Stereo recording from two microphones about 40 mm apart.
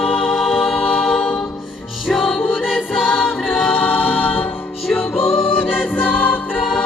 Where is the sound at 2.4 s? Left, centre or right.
Left.